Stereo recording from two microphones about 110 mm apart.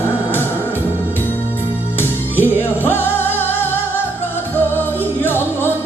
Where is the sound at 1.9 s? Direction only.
20° left (ahead or behind).